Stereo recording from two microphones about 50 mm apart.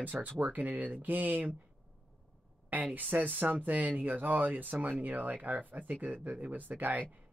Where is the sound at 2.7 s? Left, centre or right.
Right.